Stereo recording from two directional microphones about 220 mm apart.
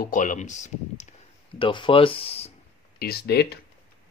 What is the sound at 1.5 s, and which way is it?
Speech, 20° left (ahead or behind).